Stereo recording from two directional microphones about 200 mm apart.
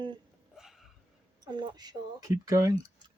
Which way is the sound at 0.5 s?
Centre (ahead or behind).